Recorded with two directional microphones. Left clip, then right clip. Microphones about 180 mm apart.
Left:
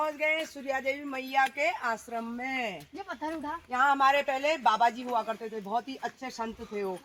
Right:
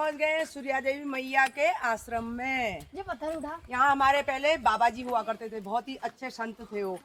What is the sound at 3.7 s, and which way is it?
Speech, 15° left (ahead or behind).